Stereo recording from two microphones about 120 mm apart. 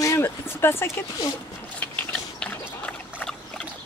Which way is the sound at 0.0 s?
20° left (ahead or behind).